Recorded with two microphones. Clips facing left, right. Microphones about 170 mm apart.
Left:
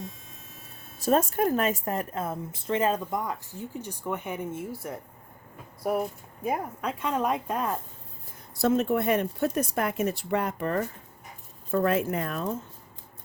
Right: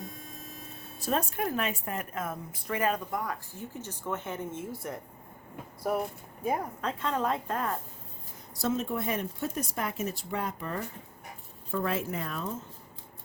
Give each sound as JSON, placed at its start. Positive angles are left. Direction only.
{"t": 0.0, "sound": "a sound", "side_deg": 0}
{"t": 0.9, "sound": "a woman's voice", "side_deg": 45}
{"t": 7.0, "sound": "speech", "side_deg": 15}
{"t": 8.5, "sound": "speech", "side_deg": 60}
{"t": 11.7, "sound": "speech", "side_deg": 55}